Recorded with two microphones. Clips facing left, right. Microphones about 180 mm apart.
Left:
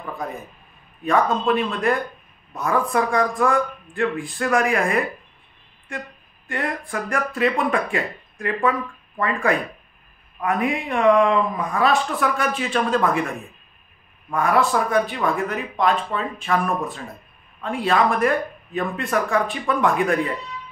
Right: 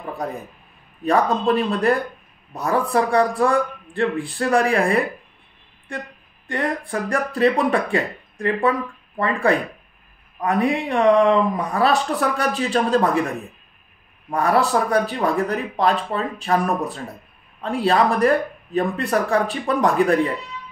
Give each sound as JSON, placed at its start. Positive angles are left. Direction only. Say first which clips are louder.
{"t": 1.0, "sound": "speech", "louder": "right 1 dB", "side_deg": -35}
{"t": 6.4, "sound": "speech", "louder": "right 3 dB", "side_deg": -35}
{"t": 14.3, "sound": "speech", "louder": "right 1 dB", "side_deg": -35}